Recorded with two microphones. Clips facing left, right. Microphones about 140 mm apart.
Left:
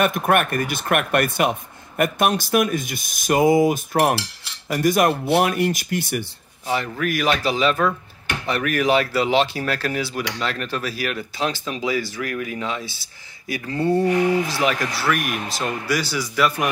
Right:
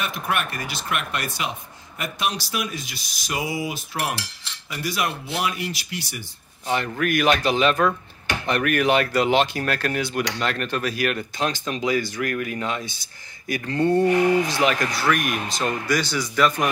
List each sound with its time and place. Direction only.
0.0 s speech: 55° left (ahead or behind)
6.7 s speech: centre (ahead or behind)